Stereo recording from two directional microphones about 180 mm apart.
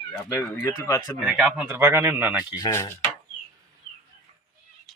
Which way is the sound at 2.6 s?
15° left (ahead or behind).